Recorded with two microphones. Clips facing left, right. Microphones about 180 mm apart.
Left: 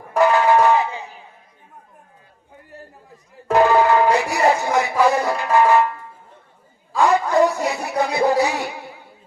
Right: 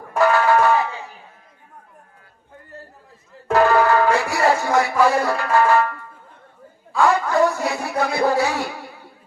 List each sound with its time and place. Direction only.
0.2 s music: 20° left (ahead or behind)
3.5 s music: 20° left (ahead or behind)
6.9 s a sound: 15° left (ahead or behind)